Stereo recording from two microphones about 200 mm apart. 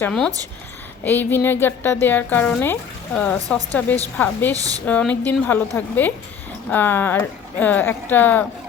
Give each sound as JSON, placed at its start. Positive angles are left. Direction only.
{"t": 0.0, "sound": "speech", "side_deg": 5}
{"t": 4.5, "sound": "speech", "side_deg": -15}
{"t": 4.9, "sound": "speech", "side_deg": 5}